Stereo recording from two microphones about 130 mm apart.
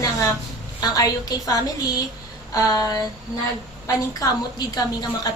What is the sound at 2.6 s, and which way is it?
A woman's voice, 25° left (ahead or behind).